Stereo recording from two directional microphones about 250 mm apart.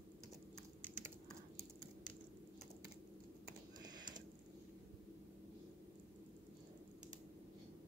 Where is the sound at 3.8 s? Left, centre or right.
Centre.